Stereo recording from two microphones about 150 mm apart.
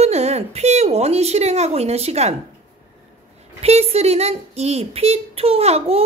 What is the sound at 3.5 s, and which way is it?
A woman's voice, 45° right (ahead or behind).